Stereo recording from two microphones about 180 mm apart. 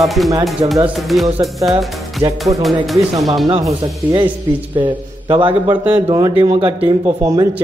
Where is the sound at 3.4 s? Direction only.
25° right (ahead or behind).